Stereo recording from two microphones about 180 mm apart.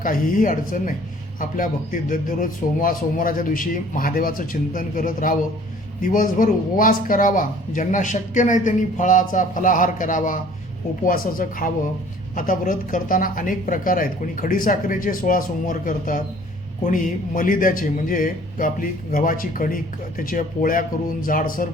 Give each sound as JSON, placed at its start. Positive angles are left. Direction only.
{"t": 0.0, "sound": "speech", "side_deg": 50}